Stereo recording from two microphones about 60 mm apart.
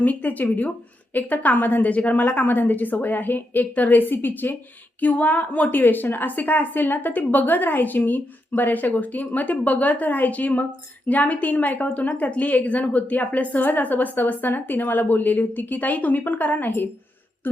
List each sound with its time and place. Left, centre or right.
0.0 s a woman's voice: left